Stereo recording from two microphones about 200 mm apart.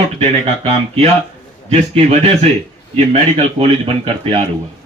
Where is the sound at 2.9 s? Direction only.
30° right (ahead or behind).